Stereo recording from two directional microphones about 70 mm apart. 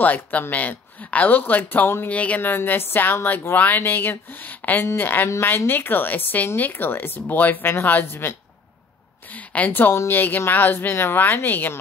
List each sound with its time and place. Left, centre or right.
0.0 s speech: left
2.0 s speech: centre
9.3 s a woman's voice: left
9.7 s speech: left